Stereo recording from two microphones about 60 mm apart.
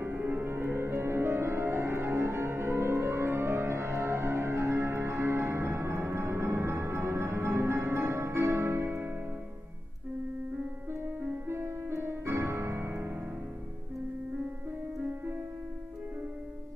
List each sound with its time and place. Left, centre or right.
0.0 s music: right
11.1 s music: right